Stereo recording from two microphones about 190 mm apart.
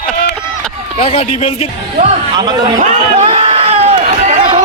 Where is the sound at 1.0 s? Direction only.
30° left (ahead or behind).